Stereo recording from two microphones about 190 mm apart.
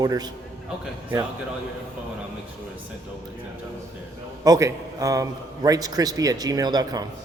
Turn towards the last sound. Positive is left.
turn(degrees=-20)  # may be behind; listen again after turning